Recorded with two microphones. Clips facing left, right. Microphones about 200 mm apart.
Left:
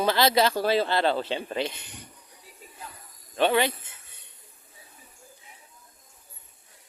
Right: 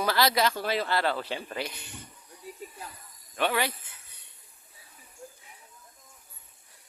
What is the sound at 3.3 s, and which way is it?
Speech, 25° left (ahead or behind).